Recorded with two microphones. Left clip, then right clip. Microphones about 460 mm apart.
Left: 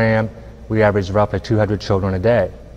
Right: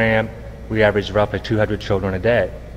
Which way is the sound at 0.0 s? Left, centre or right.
Left.